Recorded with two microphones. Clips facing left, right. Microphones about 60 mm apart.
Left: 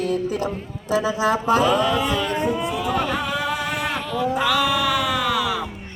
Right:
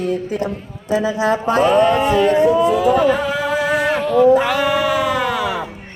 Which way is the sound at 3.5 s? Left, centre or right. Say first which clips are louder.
Right 8 dB; right.